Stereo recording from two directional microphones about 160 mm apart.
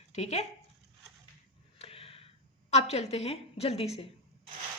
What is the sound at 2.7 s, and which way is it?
A woman's voice, 45° left (ahead or behind).